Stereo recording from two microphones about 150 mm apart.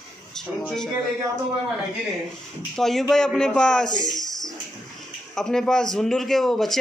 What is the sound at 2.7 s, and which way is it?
A man's voice, centre (ahead or behind).